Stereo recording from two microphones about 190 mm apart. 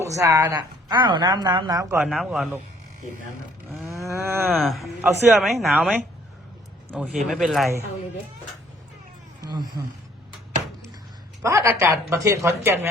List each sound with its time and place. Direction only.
0.0 s a woman's voice: 15° right (ahead or behind)
2.0 s speech: centre (ahead or behind)
4.1 s a woman's voice: 10° right (ahead or behind)
4.5 s speech: centre (ahead or behind)
9.4 s speech: 20° right (ahead or behind)
11.4 s a woman's voice: 15° right (ahead or behind)